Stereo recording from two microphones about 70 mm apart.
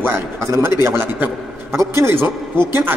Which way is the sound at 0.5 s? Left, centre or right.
Right.